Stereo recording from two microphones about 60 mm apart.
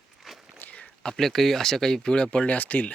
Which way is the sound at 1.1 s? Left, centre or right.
Centre.